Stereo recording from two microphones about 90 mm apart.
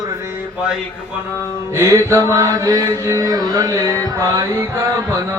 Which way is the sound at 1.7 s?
35° right (ahead or behind).